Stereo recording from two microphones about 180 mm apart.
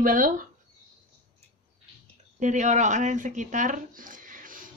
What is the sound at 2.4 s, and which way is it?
Speech, 45° right (ahead or behind).